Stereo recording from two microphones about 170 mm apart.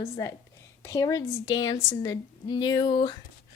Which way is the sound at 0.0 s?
20° left (ahead or behind).